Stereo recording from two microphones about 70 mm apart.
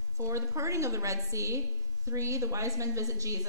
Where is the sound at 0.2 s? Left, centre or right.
Right.